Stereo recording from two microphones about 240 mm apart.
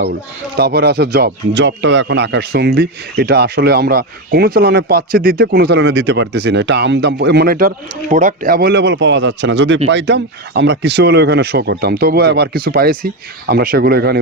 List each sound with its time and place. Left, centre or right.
0.5 s speech: right